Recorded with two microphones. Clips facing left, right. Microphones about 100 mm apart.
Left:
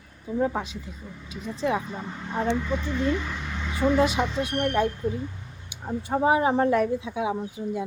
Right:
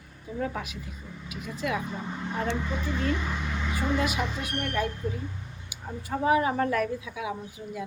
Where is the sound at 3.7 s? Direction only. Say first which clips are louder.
Left 7 dB; 30° left (ahead or behind).